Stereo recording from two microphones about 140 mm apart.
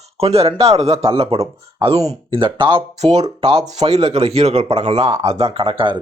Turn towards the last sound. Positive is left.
turn(degrees=-35)  # may be behind; listen again after turning